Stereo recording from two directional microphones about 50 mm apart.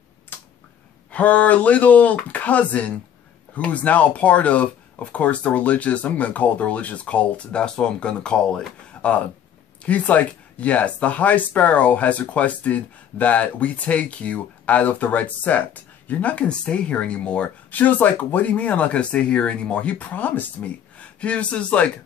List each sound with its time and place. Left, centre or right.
0.3 s a sound: left
1.1 s speech: left
9.8 s speech: left
17.6 s speech: left